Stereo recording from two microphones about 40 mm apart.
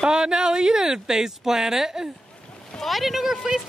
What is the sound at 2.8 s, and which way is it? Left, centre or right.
Speech, centre.